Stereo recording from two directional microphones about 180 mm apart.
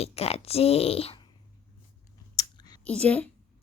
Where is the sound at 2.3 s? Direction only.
20° left (ahead or behind).